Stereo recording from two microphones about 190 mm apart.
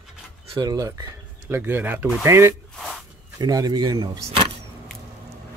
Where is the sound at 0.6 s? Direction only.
20° right (ahead or behind).